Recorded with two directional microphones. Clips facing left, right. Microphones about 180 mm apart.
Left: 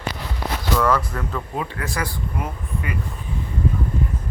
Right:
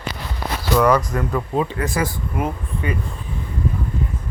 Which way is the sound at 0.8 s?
15° right (ahead or behind).